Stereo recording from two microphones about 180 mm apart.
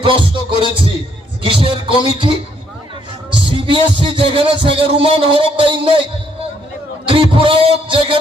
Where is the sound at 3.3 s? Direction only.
25° right (ahead or behind).